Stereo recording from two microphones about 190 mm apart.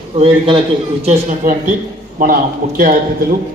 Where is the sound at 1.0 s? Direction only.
40° right (ahead or behind).